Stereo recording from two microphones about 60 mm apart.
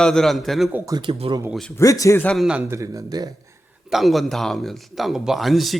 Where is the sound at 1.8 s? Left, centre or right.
Left.